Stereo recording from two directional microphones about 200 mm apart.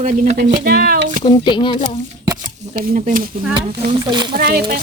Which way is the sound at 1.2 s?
25° left (ahead or behind).